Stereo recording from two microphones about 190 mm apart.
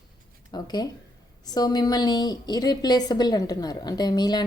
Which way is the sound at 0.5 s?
20° left (ahead or behind).